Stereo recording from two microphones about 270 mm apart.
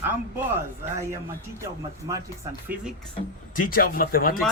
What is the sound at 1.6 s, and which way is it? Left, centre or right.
Speech, centre.